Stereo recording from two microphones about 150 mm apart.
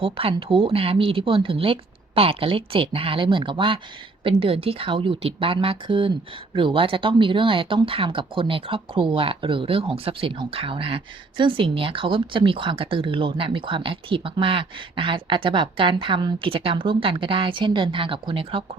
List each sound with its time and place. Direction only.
0.0 s speech: 40° right (ahead or behind)